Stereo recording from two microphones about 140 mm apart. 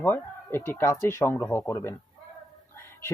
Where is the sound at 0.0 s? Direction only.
15° left (ahead or behind).